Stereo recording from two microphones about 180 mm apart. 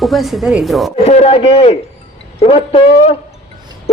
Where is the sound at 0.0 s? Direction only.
Centre (ahead or behind).